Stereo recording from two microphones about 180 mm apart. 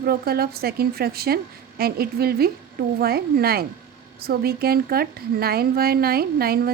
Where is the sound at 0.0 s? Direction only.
60° right (ahead or behind).